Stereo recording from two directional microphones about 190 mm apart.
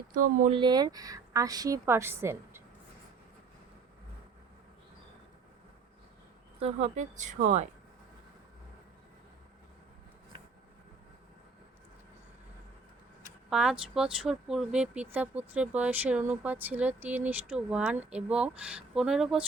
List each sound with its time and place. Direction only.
0.1 s speech: 45° right (ahead or behind)
0.5 s speech: 25° right (ahead or behind)
6.6 s speech: 35° right (ahead or behind)
13.5 s speech: 5° right (ahead or behind)